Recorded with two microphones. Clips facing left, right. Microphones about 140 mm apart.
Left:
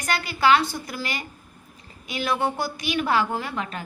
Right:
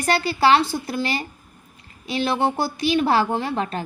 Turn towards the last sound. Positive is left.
turn(degrees=-35)  # may be behind; listen again after turning